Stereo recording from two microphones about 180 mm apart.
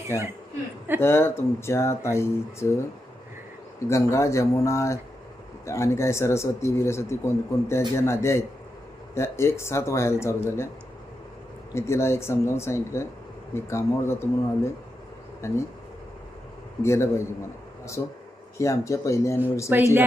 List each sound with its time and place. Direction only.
0.1 s speech: 15° left (ahead or behind)
3.8 s speech: 15° left (ahead or behind)
11.7 s speech: 15° left (ahead or behind)
16.8 s speech: 15° left (ahead or behind)
19.7 s speech: 10° right (ahead or behind)